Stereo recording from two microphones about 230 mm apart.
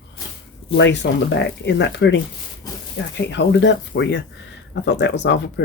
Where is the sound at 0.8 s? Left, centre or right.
Left.